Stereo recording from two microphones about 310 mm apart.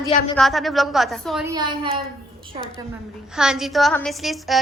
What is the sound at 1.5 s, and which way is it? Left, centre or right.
Speech, centre.